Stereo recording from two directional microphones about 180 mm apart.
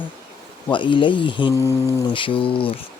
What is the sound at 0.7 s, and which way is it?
Speech, 25° left (ahead or behind).